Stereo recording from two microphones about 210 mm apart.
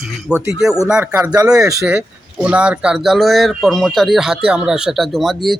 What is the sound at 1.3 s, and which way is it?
Speech, 15° right (ahead or behind).